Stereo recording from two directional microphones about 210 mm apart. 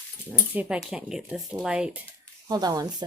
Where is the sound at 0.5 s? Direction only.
5° right (ahead or behind).